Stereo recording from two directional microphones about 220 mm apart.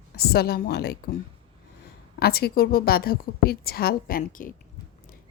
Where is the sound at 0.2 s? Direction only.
45° left (ahead or behind).